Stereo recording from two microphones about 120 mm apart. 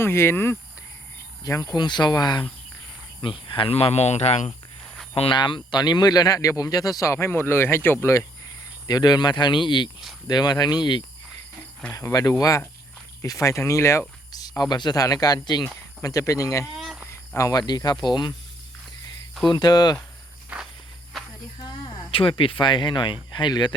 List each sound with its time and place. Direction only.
0.0 s speech: 20° left (ahead or behind)
1.5 s speech: 30° left (ahead or behind); by 4.5 s 65° left (ahead or behind)
5.1 s speech: 50° left (ahead or behind)
5.4 s speech: 40° left (ahead or behind); by 7.9 s 20° left (ahead or behind)
8.9 s speech: 35° left (ahead or behind)
16.7 s cricket: centre (ahead or behind)
17.1 s speech: 25° left (ahead or behind)
19.5 s speech: 35° left (ahead or behind)
20.5 s walk: 10° right (ahead or behind)
21.1 s a sound: centre (ahead or behind)
22.1 s speech: 50° left (ahead or behind)